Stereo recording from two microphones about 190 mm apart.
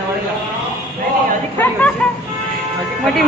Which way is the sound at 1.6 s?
10° left (ahead or behind).